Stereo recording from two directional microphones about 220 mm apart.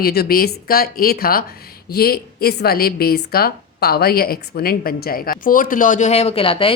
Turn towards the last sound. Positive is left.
turn(degrees=25)  # may be behind; listen again after turning